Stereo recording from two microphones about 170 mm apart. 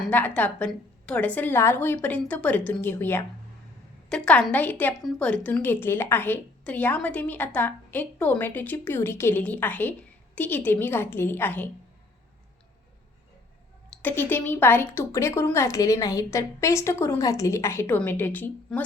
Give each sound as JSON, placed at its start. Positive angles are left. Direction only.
{"t": 0.1, "sound": "a woman's voice", "side_deg": 10}
{"t": 13.9, "sound": "a woman's voice", "side_deg": 10}